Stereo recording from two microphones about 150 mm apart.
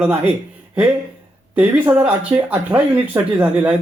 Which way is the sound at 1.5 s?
10° right (ahead or behind).